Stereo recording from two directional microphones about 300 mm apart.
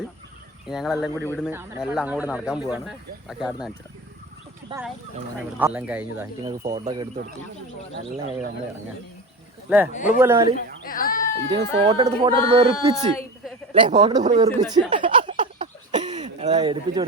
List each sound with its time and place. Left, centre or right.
0.7 s speech: centre
1.5 s speech: centre
4.7 s speech: centre
5.5 s speech: centre
9.6 s speech: centre
9.9 s speech: left
10.2 s speech: centre
10.5 s a child's voice: left
11.9 s speech: centre
14.3 s a sound: centre